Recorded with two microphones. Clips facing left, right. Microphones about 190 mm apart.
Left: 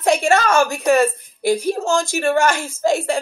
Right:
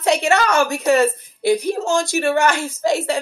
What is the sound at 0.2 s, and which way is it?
A woman's voice, 20° right (ahead or behind).